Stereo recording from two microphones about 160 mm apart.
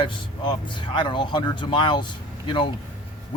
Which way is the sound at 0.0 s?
30° left (ahead or behind).